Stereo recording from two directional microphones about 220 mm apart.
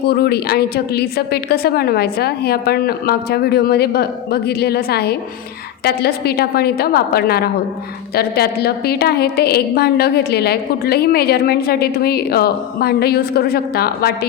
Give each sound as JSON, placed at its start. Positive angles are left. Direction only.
{"t": 0.1, "sound": "a woman's voice", "side_deg": 45}